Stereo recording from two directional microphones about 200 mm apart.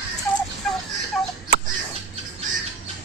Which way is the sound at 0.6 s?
5° left (ahead or behind).